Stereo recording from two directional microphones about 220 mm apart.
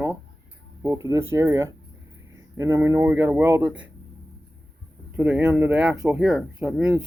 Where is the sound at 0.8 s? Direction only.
15° right (ahead or behind).